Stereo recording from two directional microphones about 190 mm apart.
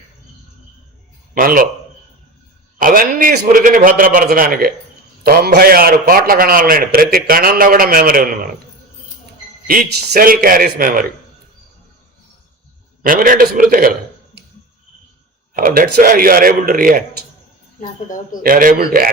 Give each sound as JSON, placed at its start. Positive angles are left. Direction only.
{"t": 1.4, "sound": "a man's voice", "side_deg": -45}
{"t": 2.7, "sound": "a man's voice", "side_deg": -50}
{"t": 9.6, "sound": "a man's voice", "side_deg": -50}
{"t": 13.0, "sound": "a man's voice", "side_deg": -45}
{"t": 15.5, "sound": "a man's voice", "side_deg": -50}
{"t": 17.7, "sound": "speech", "side_deg": 45}
{"t": 18.4, "sound": "a man's voice", "side_deg": -50}